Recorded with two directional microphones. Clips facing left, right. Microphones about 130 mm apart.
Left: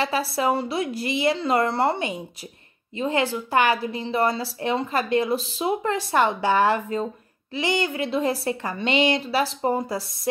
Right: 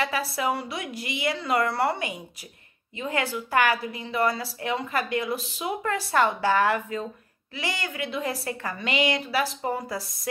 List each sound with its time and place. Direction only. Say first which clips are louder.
0.0 s a woman's voice: left 4 dB; 30° left (ahead or behind)